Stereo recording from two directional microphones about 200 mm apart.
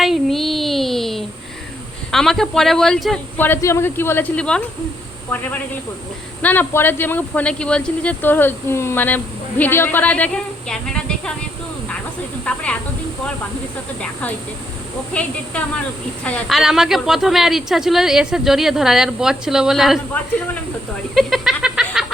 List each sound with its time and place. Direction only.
0.0 s child singing: centre (ahead or behind)
2.1 s speech: centre (ahead or behind)
12.5 s speech: 5° left (ahead or behind)
14.0 s speech: 10° left (ahead or behind)
21.2 s music: centre (ahead or behind)